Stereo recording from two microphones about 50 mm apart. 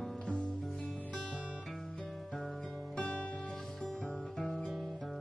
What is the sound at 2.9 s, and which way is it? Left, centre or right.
Music, left.